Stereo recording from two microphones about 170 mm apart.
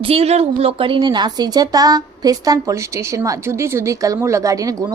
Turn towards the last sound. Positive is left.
turn(degrees=-20)  # may be behind; listen again after turning